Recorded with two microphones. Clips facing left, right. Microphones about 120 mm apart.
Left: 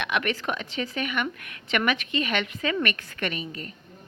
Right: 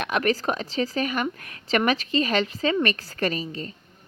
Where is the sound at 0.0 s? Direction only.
40° right (ahead or behind).